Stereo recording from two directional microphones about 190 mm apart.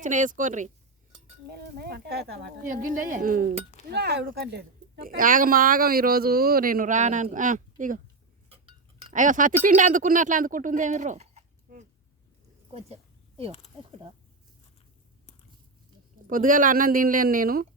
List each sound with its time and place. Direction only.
0.0 s speech: 40° right (ahead or behind)
1.5 s speech: 55° right (ahead or behind)
3.8 s speech: 60° right (ahead or behind); by 8.0 s 45° right (ahead or behind)
8.4 s cutlery: 30° right (ahead or behind)
9.1 s speech: 45° right (ahead or behind)
12.7 s a sound: 30° right (ahead or behind)
16.2 s speech: 45° right (ahead or behind)